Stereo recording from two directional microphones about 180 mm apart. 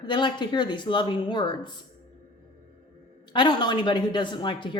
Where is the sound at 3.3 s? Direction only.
25° left (ahead or behind).